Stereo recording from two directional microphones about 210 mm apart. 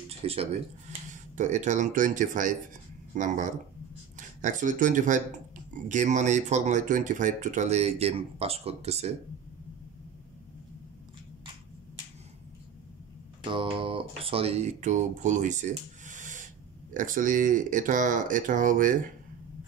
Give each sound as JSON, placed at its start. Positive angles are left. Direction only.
{"t": 0.2, "sound": "speech", "side_deg": -30}
{"t": 13.4, "sound": "speech", "side_deg": -25}